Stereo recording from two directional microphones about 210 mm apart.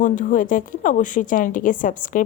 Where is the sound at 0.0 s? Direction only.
40° left (ahead or behind).